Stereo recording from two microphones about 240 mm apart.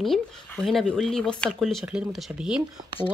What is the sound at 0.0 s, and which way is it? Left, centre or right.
Speech, centre.